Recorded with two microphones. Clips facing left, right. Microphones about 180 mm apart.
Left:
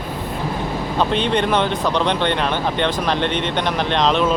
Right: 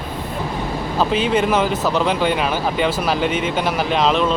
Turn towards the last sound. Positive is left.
turn(degrees=0)  # may be behind; listen again after turning